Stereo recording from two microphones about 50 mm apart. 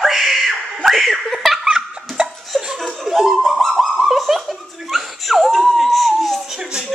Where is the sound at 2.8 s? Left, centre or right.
Centre.